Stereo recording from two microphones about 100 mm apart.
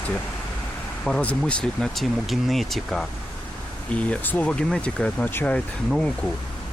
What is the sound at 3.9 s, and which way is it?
Speech, 15° left (ahead or behind).